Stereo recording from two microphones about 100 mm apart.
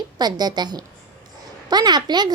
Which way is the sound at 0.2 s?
45° right (ahead or behind).